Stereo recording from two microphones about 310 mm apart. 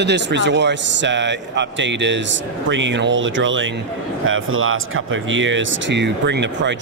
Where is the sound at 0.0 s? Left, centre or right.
Right.